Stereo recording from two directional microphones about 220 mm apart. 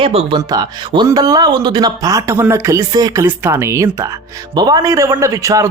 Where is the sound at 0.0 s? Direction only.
25° right (ahead or behind).